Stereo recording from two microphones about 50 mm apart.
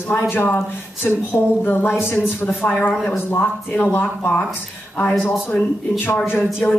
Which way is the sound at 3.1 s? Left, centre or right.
Left.